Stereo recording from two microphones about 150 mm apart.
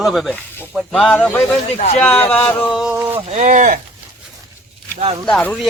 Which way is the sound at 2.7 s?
5° right (ahead or behind).